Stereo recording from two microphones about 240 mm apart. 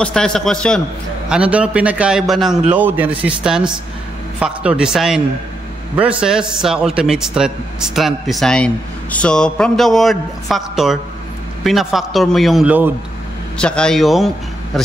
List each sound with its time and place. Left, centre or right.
0.0 s speech: centre
13.6 s speech: centre